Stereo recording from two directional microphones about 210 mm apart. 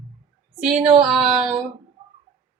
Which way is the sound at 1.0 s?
Centre (ahead or behind).